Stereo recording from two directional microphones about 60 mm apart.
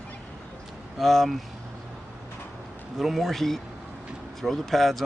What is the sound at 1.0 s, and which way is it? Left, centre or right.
Speech, centre.